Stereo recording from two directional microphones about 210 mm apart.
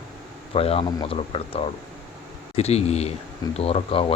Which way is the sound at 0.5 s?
25° left (ahead or behind).